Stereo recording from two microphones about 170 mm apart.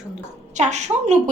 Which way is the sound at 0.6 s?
40° right (ahead or behind).